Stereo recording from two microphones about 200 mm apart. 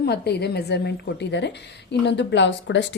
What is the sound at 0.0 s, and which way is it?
A woman's voice, 55° left (ahead or behind).